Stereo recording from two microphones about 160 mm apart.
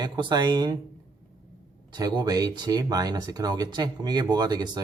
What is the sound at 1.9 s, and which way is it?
Speech, 25° right (ahead or behind).